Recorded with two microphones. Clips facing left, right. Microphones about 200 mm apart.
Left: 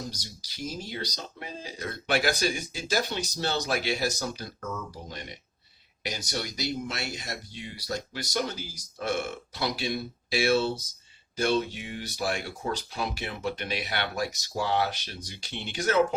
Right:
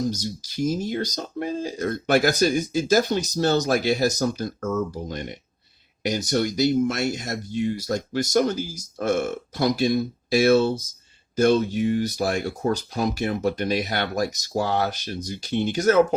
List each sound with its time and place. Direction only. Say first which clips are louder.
0.1 s speech: right 15 dB; 45° right (ahead or behind)